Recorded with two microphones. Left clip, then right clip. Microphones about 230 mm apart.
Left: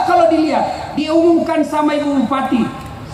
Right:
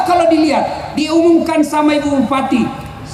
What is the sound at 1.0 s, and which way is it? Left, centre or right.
A man's voice, right.